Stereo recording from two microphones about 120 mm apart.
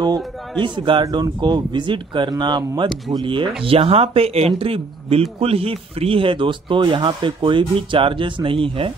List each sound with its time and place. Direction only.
0.0 s speech: 40° right (ahead or behind)